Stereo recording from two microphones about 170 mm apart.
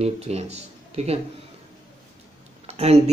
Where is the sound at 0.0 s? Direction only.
40° right (ahead or behind).